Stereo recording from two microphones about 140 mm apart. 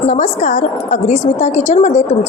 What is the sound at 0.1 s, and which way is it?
A woman's voice, 60° left (ahead or behind).